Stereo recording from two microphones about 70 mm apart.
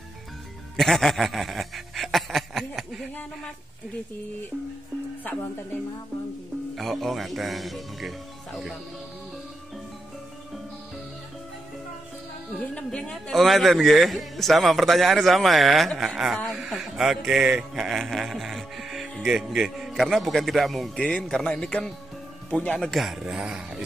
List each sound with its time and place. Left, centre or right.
0.7 s speech: centre
6.7 s a man's voice: centre
12.7 s a man's voice: centre
22.5 s speech: left
22.8 s a man's voice: centre